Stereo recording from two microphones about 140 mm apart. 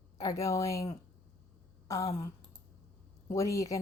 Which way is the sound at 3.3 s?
25° left (ahead or behind).